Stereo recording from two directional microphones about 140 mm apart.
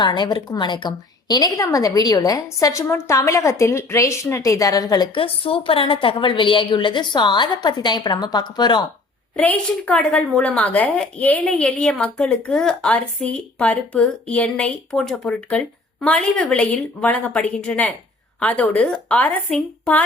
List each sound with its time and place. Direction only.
0.0 s a woman's voice: 30° left (ahead or behind)
9.3 s a woman's voice: 10° left (ahead or behind)